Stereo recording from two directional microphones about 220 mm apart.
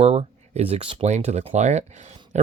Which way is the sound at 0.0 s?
30° right (ahead or behind).